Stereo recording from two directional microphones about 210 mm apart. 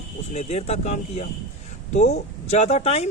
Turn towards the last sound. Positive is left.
turn(degrees=30)  # may be behind; listen again after turning